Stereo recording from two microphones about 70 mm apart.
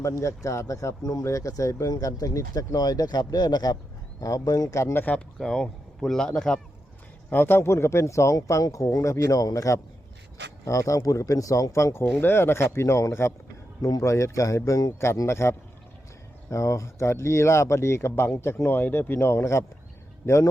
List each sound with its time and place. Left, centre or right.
0.0 s speech: left
4.2 s speech: left
4.8 s speech: left
5.4 s speech: centre
7.3 s speech: left
15.0 s speech: left